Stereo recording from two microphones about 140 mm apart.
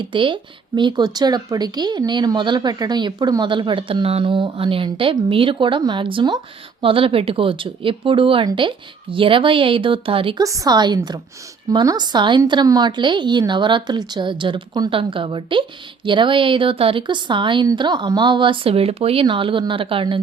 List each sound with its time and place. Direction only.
0.0 s speech: 35° right (ahead or behind)
10.4 s a woman's voice: 25° right (ahead or behind); by 20.2 s 40° right (ahead or behind)